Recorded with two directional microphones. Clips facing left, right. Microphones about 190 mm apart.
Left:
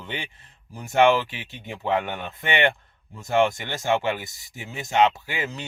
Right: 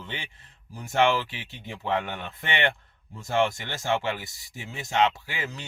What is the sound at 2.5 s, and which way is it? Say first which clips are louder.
Speech: left 5 dB; 15° left (ahead or behind).